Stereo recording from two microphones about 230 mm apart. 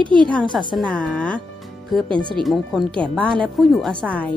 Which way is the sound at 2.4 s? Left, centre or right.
Centre.